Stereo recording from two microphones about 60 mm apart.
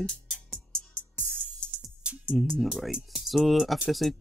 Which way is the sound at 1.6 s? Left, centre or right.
Centre.